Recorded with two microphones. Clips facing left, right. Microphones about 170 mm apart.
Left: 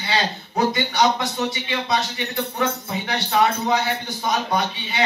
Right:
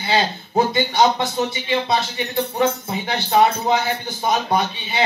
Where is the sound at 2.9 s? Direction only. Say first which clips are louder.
Right 3 dB; 30° right (ahead or behind).